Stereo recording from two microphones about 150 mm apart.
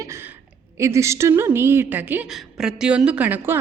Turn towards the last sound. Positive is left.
turn(degrees=-15)  # may be behind; listen again after turning